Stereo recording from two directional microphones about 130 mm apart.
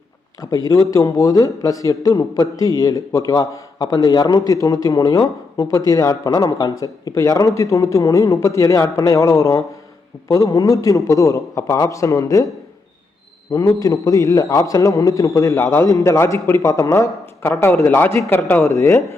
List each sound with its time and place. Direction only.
0.5 s speech: 25° left (ahead or behind)
13.7 s speech: 25° left (ahead or behind)